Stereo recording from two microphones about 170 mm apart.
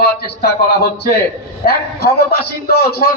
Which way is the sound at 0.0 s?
70° left (ahead or behind).